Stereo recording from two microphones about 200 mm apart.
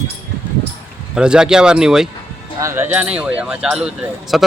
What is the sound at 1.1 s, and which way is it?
Speech, 5° right (ahead or behind).